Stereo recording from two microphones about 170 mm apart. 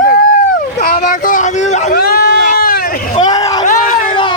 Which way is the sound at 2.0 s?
65° left (ahead or behind).